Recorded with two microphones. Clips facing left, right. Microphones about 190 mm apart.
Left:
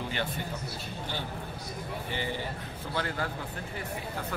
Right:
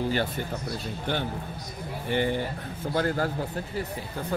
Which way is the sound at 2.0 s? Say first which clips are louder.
Right 10 dB; 55° right (ahead or behind).